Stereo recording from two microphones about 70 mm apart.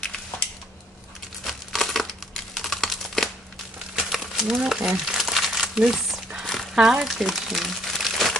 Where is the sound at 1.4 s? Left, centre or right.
Centre.